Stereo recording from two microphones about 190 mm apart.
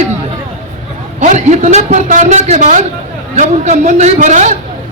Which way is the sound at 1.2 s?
40° right (ahead or behind).